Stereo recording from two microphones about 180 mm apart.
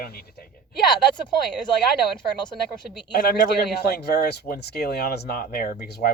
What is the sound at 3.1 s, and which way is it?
Speech, 60° left (ahead or behind).